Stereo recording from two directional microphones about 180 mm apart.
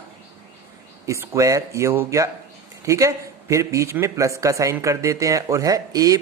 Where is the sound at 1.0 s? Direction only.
15° right (ahead or behind).